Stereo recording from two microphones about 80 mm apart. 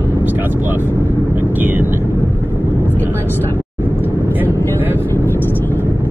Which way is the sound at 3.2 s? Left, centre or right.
Left.